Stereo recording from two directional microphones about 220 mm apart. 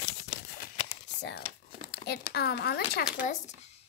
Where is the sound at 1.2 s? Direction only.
50° left (ahead or behind).